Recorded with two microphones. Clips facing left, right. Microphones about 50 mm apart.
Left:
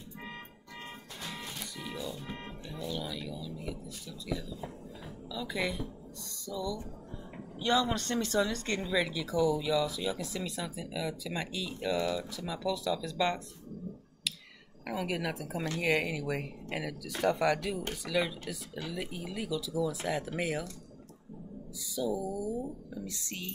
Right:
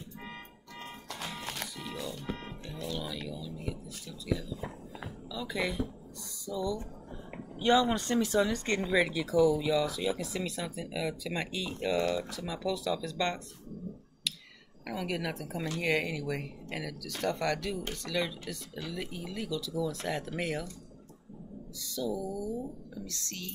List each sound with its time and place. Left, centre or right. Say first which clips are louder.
1.4 s music: right 3 dB; right
1.9 s music: left 2 dB; centre
2.9 s speech: even; centre
6.5 s a woman's voice: right 3 dB; centre
8.0 s speech: right 2 dB; centre
9.3 s speech: right 2 dB; centre
14.9 s speech: left 1 dB; centre
21.9 s speech: left 1 dB; centre